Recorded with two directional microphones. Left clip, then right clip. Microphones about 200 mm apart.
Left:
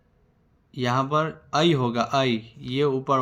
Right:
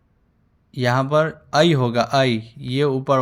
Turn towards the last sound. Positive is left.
turn(degrees=-25)  # may be behind; listen again after turning